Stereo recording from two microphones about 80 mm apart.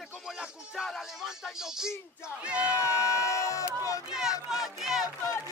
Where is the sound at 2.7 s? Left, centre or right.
Left.